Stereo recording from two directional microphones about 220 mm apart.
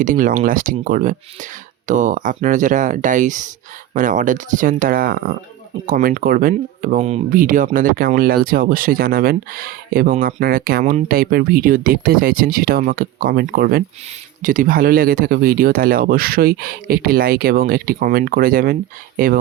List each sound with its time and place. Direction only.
0.0 s speech: 40° right (ahead or behind)